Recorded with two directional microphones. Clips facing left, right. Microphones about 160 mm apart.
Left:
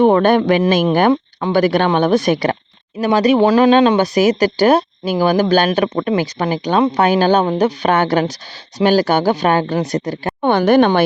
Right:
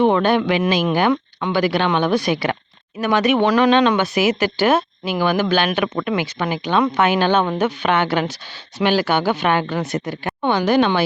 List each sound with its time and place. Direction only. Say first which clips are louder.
0.0 s speech: left 4 dB; 45° left (ahead or behind)
1.1 s speech: left 5 dB; 35° left (ahead or behind)
10.5 s speech: left 5 dB; 55° left (ahead or behind)